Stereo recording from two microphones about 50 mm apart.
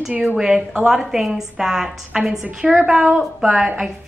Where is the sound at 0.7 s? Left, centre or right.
Centre.